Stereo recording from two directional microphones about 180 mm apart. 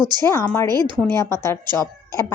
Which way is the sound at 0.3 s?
15° left (ahead or behind).